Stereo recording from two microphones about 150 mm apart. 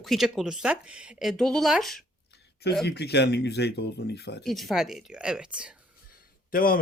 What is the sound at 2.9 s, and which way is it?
Speech, 90° left.